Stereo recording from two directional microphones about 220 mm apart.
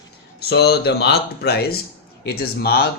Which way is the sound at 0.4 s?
45° left (ahead or behind).